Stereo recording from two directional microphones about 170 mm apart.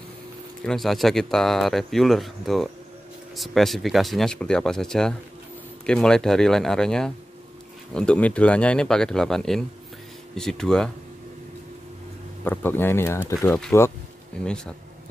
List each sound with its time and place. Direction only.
0.7 s speech: centre (ahead or behind)
12.4 s speech: 10° left (ahead or behind)
14.4 s speech: 5° left (ahead or behind)